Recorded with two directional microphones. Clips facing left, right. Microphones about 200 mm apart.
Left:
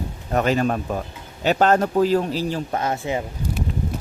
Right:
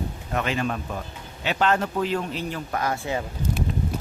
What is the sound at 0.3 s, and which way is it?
A man's voice, 40° left (ahead or behind).